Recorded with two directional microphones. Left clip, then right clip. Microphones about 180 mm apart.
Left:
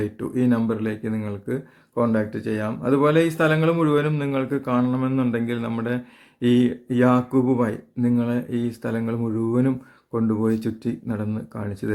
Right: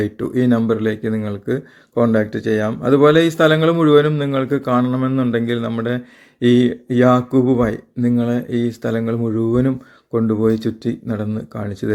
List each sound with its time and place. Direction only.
0.0 s speech: 25° right (ahead or behind)